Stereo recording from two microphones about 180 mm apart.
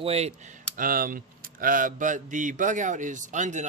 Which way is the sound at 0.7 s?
55° right (ahead or behind).